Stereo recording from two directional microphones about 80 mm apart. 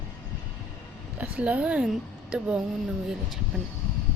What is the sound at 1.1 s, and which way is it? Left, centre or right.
A woman's voice, centre.